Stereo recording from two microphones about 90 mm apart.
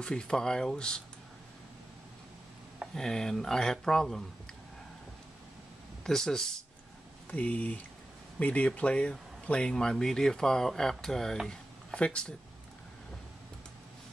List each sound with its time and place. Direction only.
0.0 s speech: 10° left (ahead or behind)
2.9 s speech: 5° left (ahead or behind)
6.0 s speech: 5° left (ahead or behind)